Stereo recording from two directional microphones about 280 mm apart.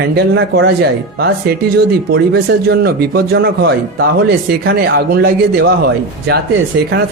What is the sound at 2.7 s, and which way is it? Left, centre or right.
Speech, right.